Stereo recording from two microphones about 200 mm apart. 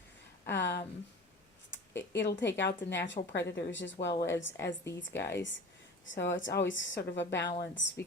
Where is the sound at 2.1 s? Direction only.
60° left (ahead or behind).